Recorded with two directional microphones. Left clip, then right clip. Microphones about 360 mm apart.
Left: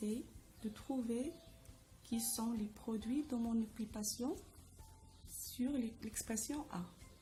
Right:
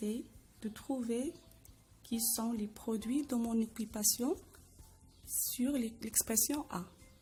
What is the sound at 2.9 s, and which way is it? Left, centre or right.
A woman's voice, right.